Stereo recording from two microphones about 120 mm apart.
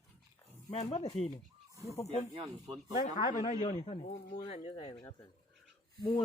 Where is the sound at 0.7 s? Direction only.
60° left (ahead or behind).